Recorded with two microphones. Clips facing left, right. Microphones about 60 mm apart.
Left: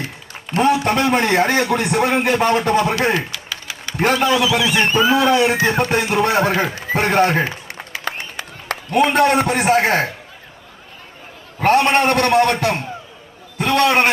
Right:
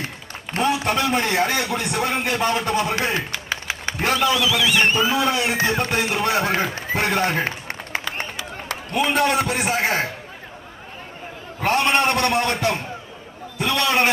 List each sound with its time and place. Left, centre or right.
0.5 s a man's voice: left
3.2 s a sound: right
4.0 s speech: left
4.9 s a man's voice: left
5.6 s speech: left
7.4 s a sound: right
8.4 s a man's voice: left
11.6 s a man's voice: left